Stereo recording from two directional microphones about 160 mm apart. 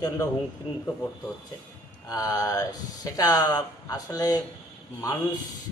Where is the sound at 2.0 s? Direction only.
20° left (ahead or behind).